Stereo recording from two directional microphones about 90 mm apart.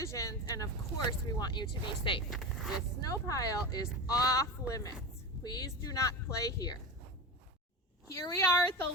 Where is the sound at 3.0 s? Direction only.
40° left (ahead or behind).